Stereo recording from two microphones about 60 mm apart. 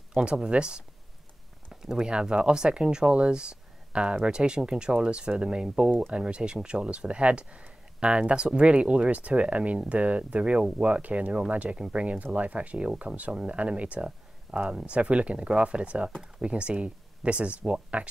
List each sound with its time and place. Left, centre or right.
0.1 s speech: centre